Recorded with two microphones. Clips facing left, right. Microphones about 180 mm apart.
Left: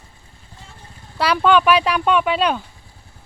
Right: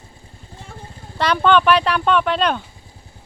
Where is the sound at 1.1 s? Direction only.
5° left (ahead or behind).